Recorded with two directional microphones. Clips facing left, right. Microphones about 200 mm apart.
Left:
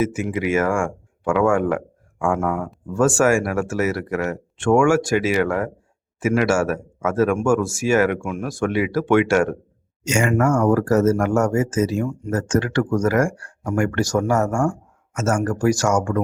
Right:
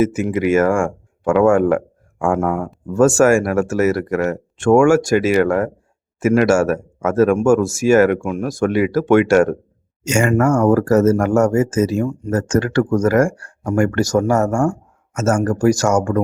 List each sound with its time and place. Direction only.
0.0 s speech: 45° right (ahead or behind)